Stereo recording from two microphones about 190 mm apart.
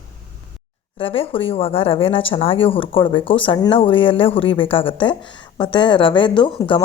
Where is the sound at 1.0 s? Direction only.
30° left (ahead or behind).